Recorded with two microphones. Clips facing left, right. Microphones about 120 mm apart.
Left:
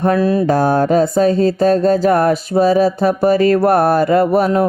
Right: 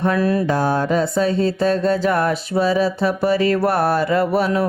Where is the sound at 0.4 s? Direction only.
45° left (ahead or behind).